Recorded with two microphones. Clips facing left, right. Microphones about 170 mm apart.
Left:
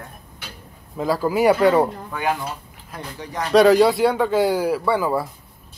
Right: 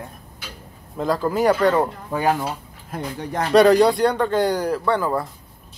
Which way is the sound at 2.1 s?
40° right (ahead or behind).